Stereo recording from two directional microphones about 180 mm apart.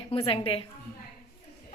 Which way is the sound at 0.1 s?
30° left (ahead or behind).